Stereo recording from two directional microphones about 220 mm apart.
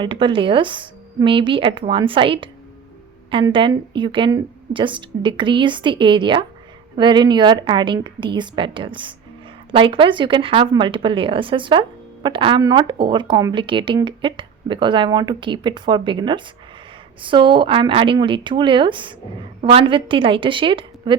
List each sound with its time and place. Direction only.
0.0 s speech: 20° right (ahead or behind)